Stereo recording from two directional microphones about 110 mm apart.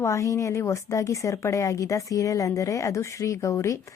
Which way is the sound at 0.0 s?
25° left (ahead or behind).